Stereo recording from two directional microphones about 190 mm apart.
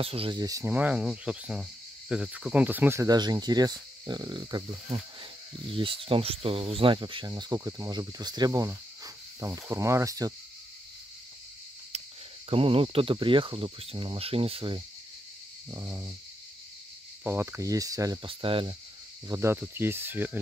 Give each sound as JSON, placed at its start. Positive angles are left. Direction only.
{"t": 0.0, "sound": "speech", "side_deg": -30}
{"t": 12.4, "sound": "speech", "side_deg": -30}
{"t": 15.7, "sound": "speech", "side_deg": -15}
{"t": 17.2, "sound": "speech", "side_deg": -10}
{"t": 19.2, "sound": "speech", "side_deg": -15}